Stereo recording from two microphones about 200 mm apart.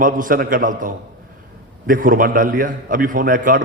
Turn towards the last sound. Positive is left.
turn(degrees=-45)  # may be behind; listen again after turning